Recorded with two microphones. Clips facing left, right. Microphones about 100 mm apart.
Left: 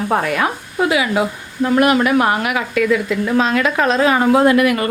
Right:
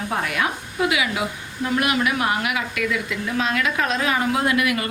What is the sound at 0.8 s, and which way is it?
A woman's voice, 35° left (ahead or behind).